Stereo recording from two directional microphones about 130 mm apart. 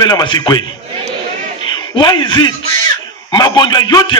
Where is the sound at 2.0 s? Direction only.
35° left (ahead or behind).